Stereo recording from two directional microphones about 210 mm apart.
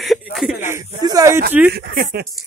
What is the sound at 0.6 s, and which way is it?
Speech, 15° right (ahead or behind).